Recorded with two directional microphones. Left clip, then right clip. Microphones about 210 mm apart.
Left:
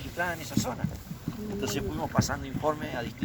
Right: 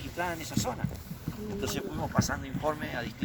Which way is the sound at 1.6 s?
35° right (ahead or behind).